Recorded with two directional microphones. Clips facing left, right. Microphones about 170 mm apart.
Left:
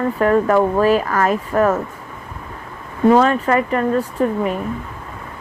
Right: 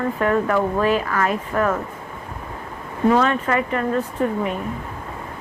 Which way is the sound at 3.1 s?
40° left (ahead or behind).